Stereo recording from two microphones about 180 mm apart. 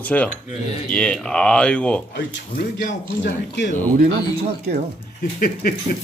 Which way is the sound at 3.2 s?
75° left (ahead or behind).